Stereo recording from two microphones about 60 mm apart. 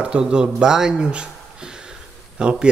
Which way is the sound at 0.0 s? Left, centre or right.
Centre.